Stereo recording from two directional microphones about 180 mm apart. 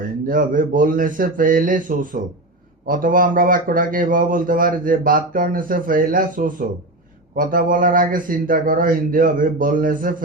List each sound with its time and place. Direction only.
0.0 s speech: 50° right (ahead or behind)